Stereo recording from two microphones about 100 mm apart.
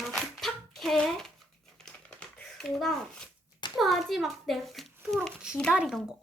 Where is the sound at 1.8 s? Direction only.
10° left (ahead or behind).